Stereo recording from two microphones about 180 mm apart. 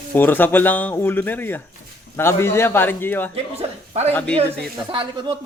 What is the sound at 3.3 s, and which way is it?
Speech, 35° right (ahead or behind).